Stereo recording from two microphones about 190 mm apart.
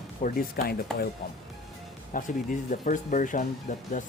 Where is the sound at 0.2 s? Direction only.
45° left (ahead or behind).